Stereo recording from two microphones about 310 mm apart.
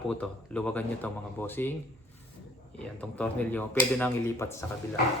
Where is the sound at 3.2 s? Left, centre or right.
Centre.